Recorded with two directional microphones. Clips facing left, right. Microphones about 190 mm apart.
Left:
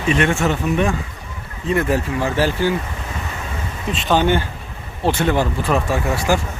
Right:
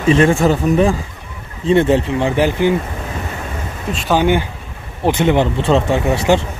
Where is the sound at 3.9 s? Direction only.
5° right (ahead or behind); by 6.4 s 25° right (ahead or behind).